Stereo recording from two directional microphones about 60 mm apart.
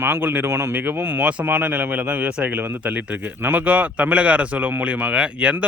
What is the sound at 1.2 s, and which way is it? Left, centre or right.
Speech, right.